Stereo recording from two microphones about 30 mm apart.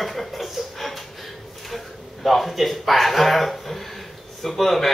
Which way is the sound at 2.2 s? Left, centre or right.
Centre.